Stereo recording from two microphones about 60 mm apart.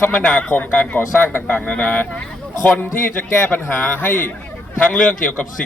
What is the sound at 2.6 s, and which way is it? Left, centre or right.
Speech, left.